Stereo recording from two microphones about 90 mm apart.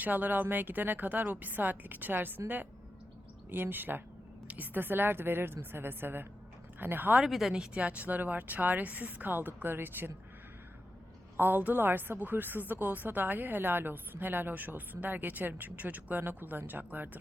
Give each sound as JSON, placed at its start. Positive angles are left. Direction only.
{"t": 0.0, "sound": "a woman's voice", "side_deg": -20}
{"t": 3.5, "sound": "a woman's voice", "side_deg": -20}
{"t": 7.2, "sound": "a woman's voice", "side_deg": 0}
{"t": 11.3, "sound": "a woman's voice", "side_deg": -20}